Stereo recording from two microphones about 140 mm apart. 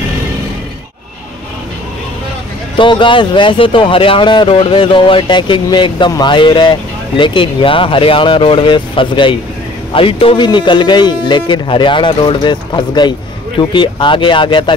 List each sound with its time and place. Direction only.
2.8 s speech: 35° left (ahead or behind)